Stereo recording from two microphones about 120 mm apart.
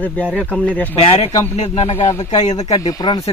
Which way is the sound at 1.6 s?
65° left (ahead or behind).